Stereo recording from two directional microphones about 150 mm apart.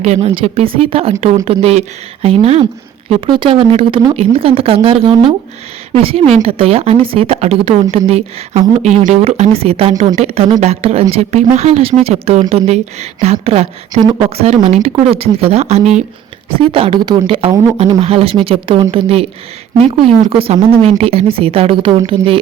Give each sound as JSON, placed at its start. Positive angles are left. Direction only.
{"t": 0.0, "sound": "speech", "side_deg": -45}
{"t": 20.3, "sound": "speech", "side_deg": -40}